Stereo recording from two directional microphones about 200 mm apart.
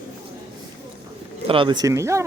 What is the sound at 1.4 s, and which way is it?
Speech, 25° right (ahead or behind).